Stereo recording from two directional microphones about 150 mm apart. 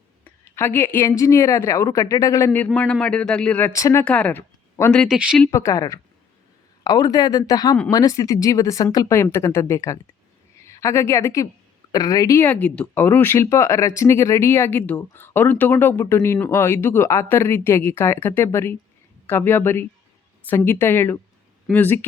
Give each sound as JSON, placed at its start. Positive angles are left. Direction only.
{"t": 0.5, "sound": "speech", "side_deg": 15}
{"t": 4.0, "sound": "speech", "side_deg": 10}
{"t": 5.5, "sound": "a woman's voice", "side_deg": 20}
{"t": 12.4, "sound": "speech", "side_deg": 10}